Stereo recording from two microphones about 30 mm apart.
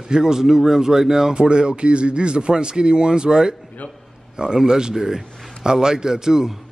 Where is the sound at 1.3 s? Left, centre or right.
Right.